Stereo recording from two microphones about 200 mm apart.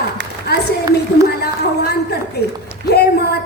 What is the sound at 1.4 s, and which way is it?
Speech, 55° left (ahead or behind).